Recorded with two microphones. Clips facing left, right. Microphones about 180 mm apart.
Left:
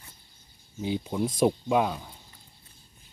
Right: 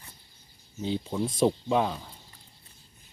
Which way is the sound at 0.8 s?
10° left (ahead or behind).